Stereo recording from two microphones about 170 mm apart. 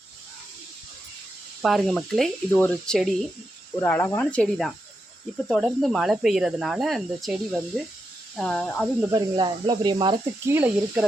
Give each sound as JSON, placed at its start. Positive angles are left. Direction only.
{"t": 1.6, "sound": "speech", "side_deg": 0}
{"t": 3.8, "sound": "speech", "side_deg": 15}
{"t": 9.1, "sound": "speech", "side_deg": -25}
{"t": 10.4, "sound": "speech", "side_deg": -10}